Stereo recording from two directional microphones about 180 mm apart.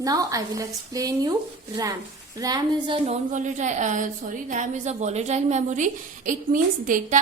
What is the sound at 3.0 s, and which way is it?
A woman's voice, 45° right (ahead or behind).